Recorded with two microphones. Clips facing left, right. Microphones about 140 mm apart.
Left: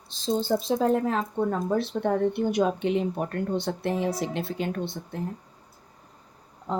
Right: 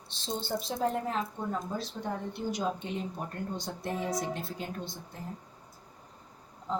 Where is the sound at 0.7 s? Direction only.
80° left; by 5.2 s 65° left (ahead or behind).